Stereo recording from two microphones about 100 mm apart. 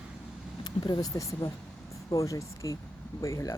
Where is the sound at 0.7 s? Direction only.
45° left (ahead or behind).